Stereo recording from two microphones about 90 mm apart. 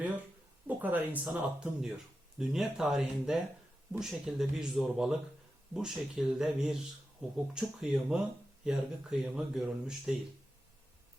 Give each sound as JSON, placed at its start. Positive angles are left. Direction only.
{"t": 0.7, "sound": "speech", "side_deg": -20}